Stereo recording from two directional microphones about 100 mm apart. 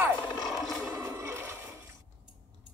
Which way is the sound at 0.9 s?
25° right (ahead or behind).